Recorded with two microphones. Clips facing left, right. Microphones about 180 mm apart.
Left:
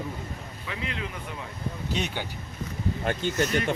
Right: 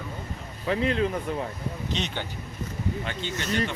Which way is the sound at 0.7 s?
40° right (ahead or behind).